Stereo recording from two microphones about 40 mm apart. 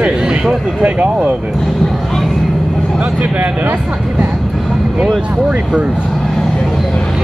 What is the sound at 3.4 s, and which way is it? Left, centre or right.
Speech, right.